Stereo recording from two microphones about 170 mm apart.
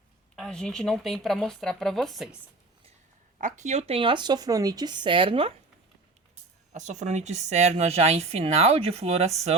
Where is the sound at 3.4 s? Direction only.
40° right (ahead or behind).